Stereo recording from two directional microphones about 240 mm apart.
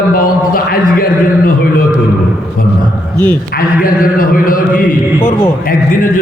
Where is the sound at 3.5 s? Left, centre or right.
Left.